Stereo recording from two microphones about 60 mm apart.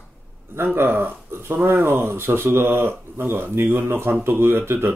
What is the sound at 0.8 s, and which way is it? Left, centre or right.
Speech, right.